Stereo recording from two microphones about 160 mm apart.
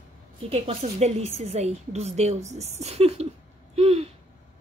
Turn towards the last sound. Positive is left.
turn(degrees=-40)  # may be behind; listen again after turning